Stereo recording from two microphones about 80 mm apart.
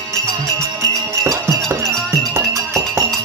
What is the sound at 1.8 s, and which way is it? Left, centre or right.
Music, centre.